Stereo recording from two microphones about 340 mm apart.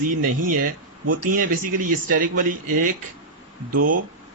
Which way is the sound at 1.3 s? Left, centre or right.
Right.